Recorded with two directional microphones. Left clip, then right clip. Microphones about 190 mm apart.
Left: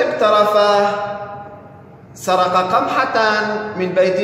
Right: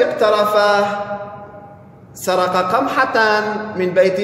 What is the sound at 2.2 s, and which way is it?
A man's voice, 45° right (ahead or behind).